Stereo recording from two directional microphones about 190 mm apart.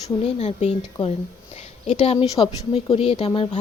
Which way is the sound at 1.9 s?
35° left (ahead or behind).